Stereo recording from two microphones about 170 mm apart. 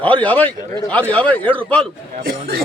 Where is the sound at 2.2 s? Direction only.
60° right (ahead or behind).